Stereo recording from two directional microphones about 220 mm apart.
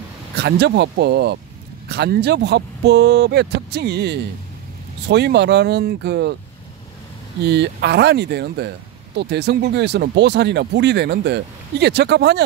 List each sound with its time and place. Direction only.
0.4 s speech: 50° right (ahead or behind)
7.4 s speech: 50° right (ahead or behind)